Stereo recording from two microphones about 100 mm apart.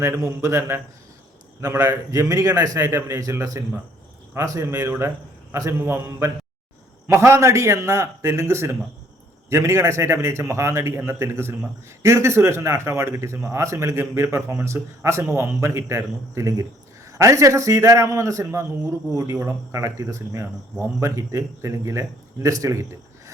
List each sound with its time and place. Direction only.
0.0 s a man's voice: 30° right (ahead or behind)